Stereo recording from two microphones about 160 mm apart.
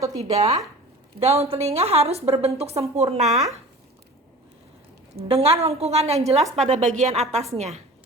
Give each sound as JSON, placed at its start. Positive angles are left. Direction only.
{"t": 0.3, "sound": "a woman's voice", "side_deg": -40}
{"t": 5.3, "sound": "a woman's voice", "side_deg": -40}